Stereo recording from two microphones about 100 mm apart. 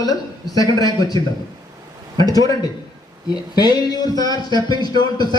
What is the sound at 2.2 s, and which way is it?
A man's voice, 40° left (ahead or behind).